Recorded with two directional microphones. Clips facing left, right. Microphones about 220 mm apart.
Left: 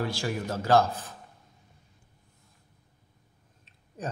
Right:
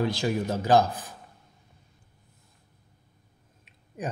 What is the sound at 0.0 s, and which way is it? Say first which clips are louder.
Speech: right 4 dB; 20° right (ahead or behind).